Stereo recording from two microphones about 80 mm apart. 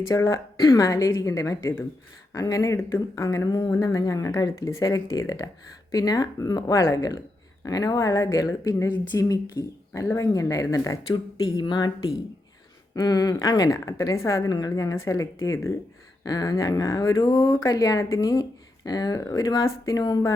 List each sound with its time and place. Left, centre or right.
0.1 s speech: left
11.1 s speech: left
12.9 s a sound: left
13.3 s speech: left
16.2 s speech: left